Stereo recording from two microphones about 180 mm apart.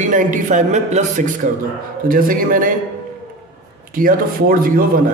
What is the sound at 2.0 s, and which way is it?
Speech, 50° right (ahead or behind).